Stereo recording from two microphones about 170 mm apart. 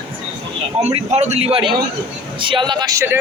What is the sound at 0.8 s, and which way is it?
A man's voice, 40° right (ahead or behind).